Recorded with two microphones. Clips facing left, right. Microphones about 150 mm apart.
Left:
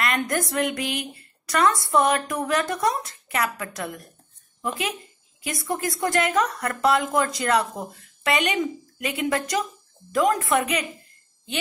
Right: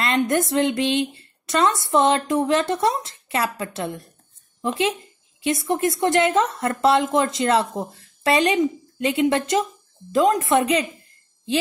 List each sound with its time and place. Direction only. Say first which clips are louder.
0.0 s a woman's voice: right 4 dB; 25° right (ahead or behind)